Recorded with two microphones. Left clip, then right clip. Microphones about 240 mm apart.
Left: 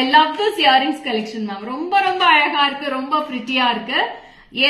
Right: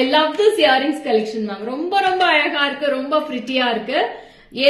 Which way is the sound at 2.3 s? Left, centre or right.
Centre.